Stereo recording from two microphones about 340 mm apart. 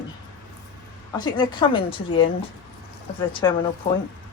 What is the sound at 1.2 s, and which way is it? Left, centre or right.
Speech, centre.